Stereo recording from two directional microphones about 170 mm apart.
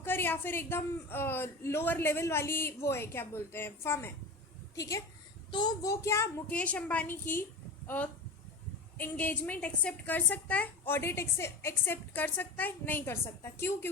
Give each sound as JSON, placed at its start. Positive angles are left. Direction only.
{"t": 0.0, "sound": "a woman's voice", "side_deg": 10}